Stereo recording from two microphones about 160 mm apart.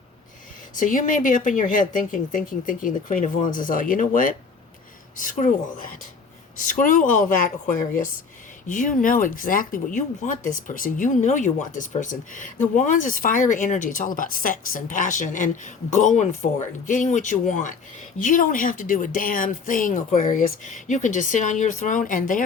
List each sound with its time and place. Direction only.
0.8 s speech: 55° left (ahead or behind)
6.6 s speech: 60° left (ahead or behind)
8.6 s speech: 55° left (ahead or behind)